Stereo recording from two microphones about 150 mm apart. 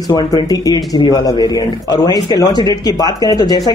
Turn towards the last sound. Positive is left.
turn(degrees=25)  # may be behind; listen again after turning